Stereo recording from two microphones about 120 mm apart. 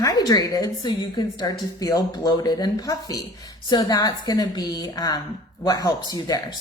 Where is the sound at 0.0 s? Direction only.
30° left (ahead or behind).